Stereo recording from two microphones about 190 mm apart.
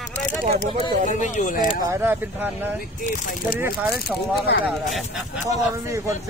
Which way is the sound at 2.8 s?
50° left (ahead or behind).